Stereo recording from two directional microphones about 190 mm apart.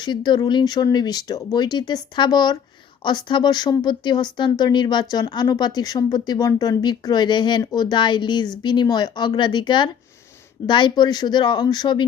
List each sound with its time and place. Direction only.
0.0 s speech: 25° left (ahead or behind)